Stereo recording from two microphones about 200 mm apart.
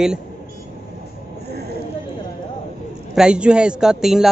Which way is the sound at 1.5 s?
55° right (ahead or behind).